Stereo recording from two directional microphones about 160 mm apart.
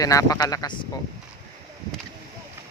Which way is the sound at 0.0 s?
20° left (ahead or behind).